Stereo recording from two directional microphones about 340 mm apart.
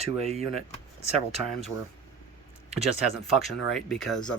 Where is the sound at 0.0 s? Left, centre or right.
Centre.